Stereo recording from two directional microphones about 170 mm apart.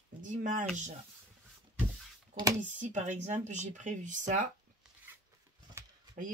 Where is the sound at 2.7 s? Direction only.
45° right (ahead or behind).